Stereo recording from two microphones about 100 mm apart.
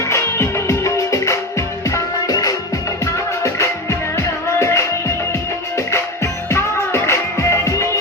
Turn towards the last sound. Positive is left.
turn(degrees=30)  # may be behind; listen again after turning